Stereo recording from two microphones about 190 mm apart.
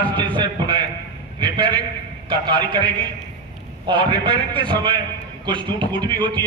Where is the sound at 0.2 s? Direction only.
25° right (ahead or behind).